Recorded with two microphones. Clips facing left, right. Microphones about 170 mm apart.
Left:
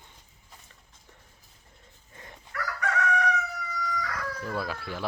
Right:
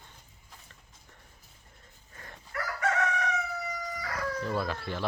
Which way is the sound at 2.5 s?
30° right (ahead or behind).